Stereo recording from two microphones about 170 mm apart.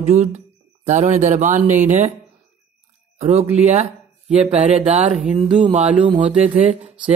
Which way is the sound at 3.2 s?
40° right (ahead or behind).